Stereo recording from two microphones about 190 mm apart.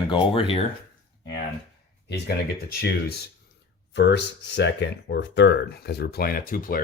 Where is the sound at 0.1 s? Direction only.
25° left (ahead or behind).